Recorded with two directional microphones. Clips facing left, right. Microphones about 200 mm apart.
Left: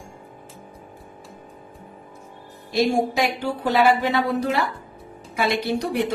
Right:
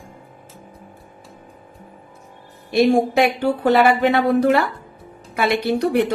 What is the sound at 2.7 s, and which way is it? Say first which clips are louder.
Speech: right 5 dB; 60° right (ahead or behind).